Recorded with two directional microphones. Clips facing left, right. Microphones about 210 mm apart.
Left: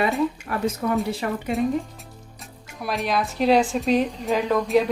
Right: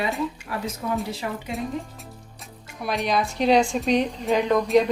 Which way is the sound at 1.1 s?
55° left (ahead or behind).